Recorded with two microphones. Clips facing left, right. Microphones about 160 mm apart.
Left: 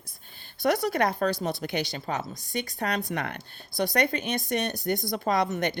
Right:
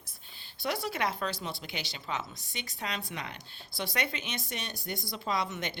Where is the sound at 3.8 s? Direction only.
45° left (ahead or behind).